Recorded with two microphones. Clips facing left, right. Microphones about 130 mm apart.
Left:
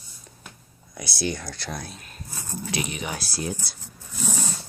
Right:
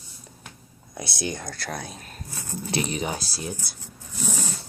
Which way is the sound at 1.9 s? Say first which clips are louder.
Right 1 dB; 40° right (ahead or behind).